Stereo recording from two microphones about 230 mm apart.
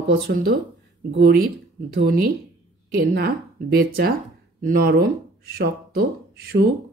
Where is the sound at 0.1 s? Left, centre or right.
Right.